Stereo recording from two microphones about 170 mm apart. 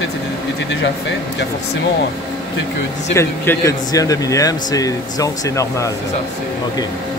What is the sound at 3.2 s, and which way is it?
Speech, 20° left (ahead or behind).